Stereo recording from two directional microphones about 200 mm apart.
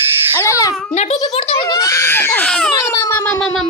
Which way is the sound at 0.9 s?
35° left (ahead or behind).